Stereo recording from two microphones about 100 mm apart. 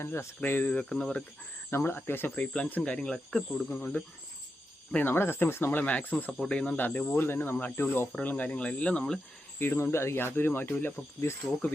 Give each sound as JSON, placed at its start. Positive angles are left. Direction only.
{"t": 0.0, "sound": "speech", "side_deg": 25}
{"t": 1.7, "sound": "speech", "side_deg": 20}
{"t": 9.6, "sound": "speech", "side_deg": 20}